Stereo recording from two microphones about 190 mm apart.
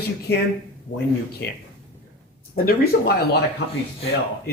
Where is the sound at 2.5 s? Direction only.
50° left (ahead or behind).